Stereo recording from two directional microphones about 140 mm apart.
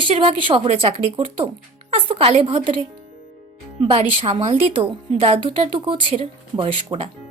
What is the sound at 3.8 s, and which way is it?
A woman's voice, 45° right (ahead or behind).